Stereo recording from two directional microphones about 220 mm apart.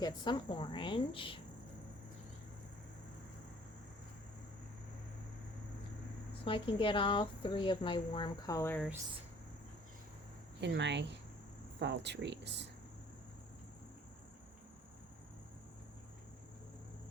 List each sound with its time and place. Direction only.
0.0 s speech: 20° left (ahead or behind)
6.4 s speech: 25° left (ahead or behind)
10.6 s speech: 50° right (ahead or behind)